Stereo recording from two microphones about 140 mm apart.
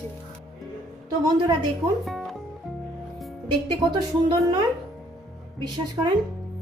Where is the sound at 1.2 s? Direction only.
35° right (ahead or behind).